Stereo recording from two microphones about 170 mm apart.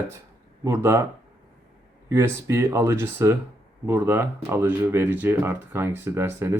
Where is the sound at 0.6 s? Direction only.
15° right (ahead or behind).